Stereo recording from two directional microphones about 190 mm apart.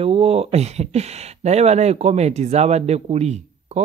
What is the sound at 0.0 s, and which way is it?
Speech, 30° right (ahead or behind).